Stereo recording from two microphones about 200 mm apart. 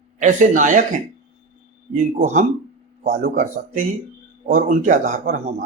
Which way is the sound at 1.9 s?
40° right (ahead or behind).